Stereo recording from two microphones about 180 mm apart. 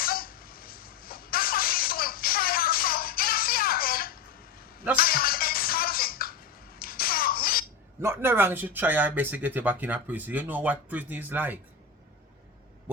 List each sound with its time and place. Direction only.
0.0 s a sound: 55° left (ahead or behind)
4.9 s music: 55° left (ahead or behind)
8.0 s speech: 15° right (ahead or behind)